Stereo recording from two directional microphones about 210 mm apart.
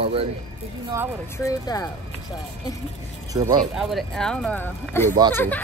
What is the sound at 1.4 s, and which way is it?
Speech, 15° left (ahead or behind).